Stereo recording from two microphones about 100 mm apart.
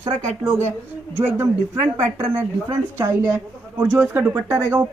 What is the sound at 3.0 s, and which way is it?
A woman's voice, 25° right (ahead or behind).